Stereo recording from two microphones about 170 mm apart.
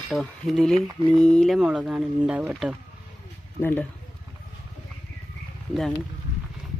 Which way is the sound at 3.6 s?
10° left (ahead or behind).